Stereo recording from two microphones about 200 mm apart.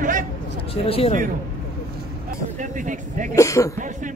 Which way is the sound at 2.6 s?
40° right (ahead or behind).